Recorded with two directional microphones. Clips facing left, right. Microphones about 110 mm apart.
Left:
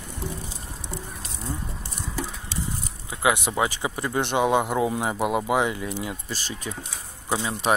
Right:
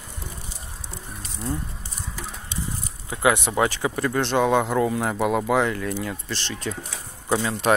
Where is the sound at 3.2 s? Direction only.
10° left (ahead or behind).